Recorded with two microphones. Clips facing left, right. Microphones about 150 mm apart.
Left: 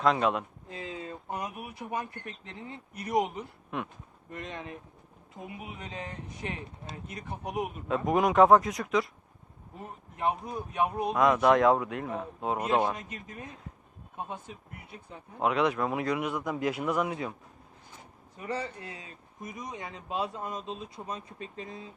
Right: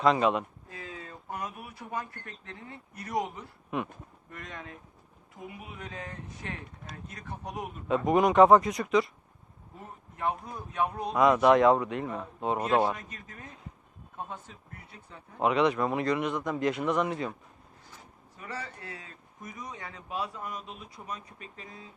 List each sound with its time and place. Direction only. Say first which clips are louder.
0.0 s a man's voice: right 2 dB; centre (ahead or behind)
0.7 s a man's voice: left 4 dB; 25° left (ahead or behind)
7.9 s a man's voice: right 3 dB; centre (ahead or behind)
9.7 s a man's voice: left 2 dB; 20° left (ahead or behind)
11.1 s a man's voice: right 2 dB; centre (ahead or behind)
12.5 s a man's voice: right 1 dB; 15° left (ahead or behind)
15.4 s a man's voice: right 2 dB; centre (ahead or behind)
18.3 s a man's voice: left 5 dB; 20° left (ahead or behind)